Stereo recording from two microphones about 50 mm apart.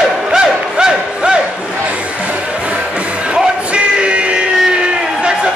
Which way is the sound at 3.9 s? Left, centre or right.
Right.